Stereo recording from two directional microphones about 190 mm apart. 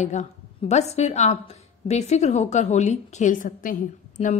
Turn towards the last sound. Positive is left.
turn(degrees=45)  # may be behind; listen again after turning